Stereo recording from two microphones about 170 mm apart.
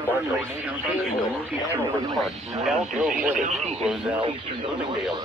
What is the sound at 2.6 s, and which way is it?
Speech, 5° right (ahead or behind).